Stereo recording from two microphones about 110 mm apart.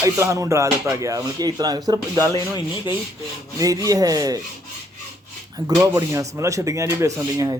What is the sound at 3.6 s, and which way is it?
Speech, 30° right (ahead or behind).